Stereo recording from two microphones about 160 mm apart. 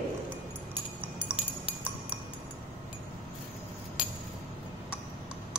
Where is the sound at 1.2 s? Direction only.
10° right (ahead or behind).